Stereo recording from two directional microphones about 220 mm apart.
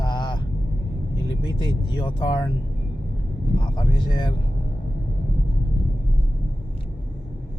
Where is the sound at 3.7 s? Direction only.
20° left (ahead or behind).